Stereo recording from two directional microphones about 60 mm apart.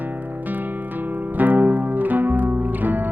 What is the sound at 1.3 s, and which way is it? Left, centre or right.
Music, right.